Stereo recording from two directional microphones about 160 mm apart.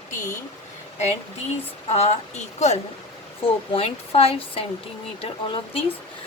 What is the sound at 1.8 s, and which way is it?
Speech, 40° left (ahead or behind).